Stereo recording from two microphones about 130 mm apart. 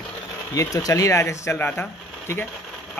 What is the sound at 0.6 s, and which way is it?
Speech, 25° left (ahead or behind).